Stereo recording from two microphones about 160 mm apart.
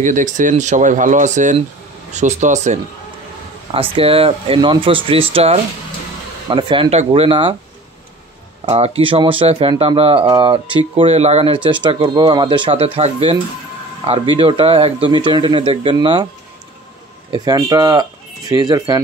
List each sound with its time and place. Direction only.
0.0 s speech: 50° right (ahead or behind)
3.9 s speech: 35° right (ahead or behind)
8.6 s speech: 40° right (ahead or behind)
14.4 s speech: 35° right (ahead or behind)
17.3 s speech: 25° right (ahead or behind)